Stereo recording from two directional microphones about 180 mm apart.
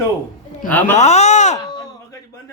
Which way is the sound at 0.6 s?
10° left (ahead or behind).